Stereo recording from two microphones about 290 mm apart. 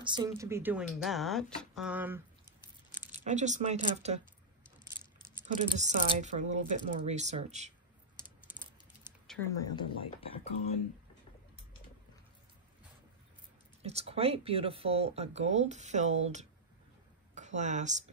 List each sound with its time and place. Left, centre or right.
0.0 s speech: centre
3.1 s speech: right
5.5 s speech: right
8.5 s typing: centre
9.3 s speech: centre
13.8 s speech: right